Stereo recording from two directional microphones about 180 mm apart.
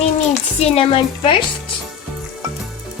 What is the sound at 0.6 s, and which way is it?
Speech, 35° left (ahead or behind).